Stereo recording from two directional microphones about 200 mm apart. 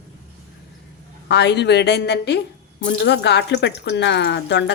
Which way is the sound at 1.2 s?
60° left (ahead or behind).